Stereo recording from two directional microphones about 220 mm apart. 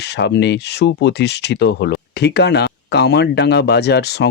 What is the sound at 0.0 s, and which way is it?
Speech, 50° left (ahead or behind).